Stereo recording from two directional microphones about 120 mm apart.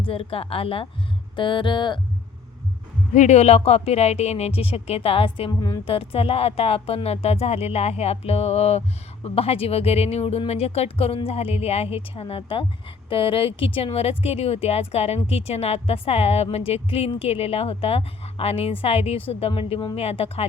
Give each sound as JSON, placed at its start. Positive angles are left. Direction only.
{"t": 0.0, "sound": "a woman's voice", "side_deg": 50}
{"t": 3.2, "sound": "speech", "side_deg": 70}
{"t": 5.5, "sound": "a woman's voice", "side_deg": 35}
{"t": 5.8, "sound": "speech", "side_deg": 50}